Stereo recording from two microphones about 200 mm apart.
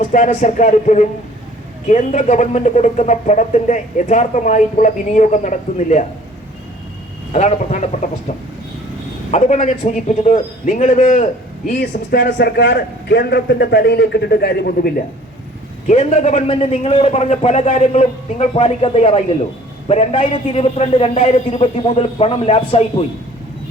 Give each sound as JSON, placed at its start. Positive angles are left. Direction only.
{"t": 0.1, "sound": "speech", "side_deg": 40}
{"t": 7.3, "sound": "speech", "side_deg": 35}
{"t": 9.3, "sound": "speech", "side_deg": 35}
{"t": 11.7, "sound": "a man's voice", "side_deg": 50}
{"t": 15.9, "sound": "a man's voice", "side_deg": 35}